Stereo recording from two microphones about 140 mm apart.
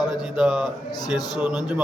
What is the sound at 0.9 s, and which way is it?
Speech, 30° left (ahead or behind).